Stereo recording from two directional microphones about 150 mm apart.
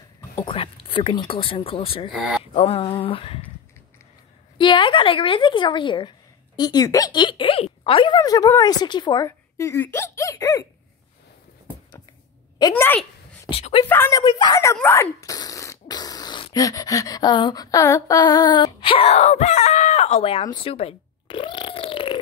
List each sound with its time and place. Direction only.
0.4 s speech: 40° left (ahead or behind)
2.1 s speech: 5° right (ahead or behind)
2.5 s speech: 40° left (ahead or behind)
4.6 s a woman's voice: 30° left (ahead or behind)
12.7 s a woman's voice: 15° left (ahead or behind)
13.5 s a sound: 40° left (ahead or behind)
13.8 s a woman's voice: 15° left (ahead or behind)
14.1 s speech: 30° left (ahead or behind)
20.6 s a sound: 40° left (ahead or behind)